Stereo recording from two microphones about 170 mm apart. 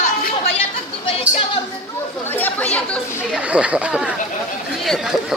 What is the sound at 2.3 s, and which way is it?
Chatter, 10° left (ahead or behind).